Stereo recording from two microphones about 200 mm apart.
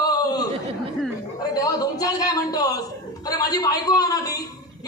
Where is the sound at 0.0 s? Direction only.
20° left (ahead or behind).